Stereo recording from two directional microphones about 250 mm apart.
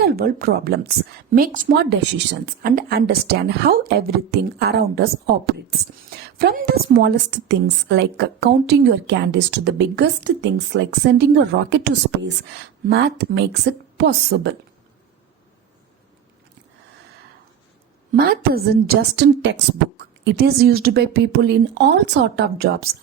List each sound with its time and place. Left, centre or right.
0.0 s a woman's voice: right
18.1 s a woman's voice: right